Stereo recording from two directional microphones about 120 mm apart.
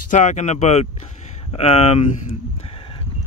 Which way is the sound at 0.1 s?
85° left.